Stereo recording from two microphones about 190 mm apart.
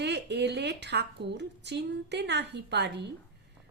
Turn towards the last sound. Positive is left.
turn(degrees=-60)  # may be behind; listen again after turning